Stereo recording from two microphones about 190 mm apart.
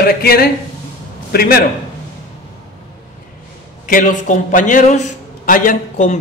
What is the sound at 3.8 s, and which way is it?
A man's voice, 45° left (ahead or behind).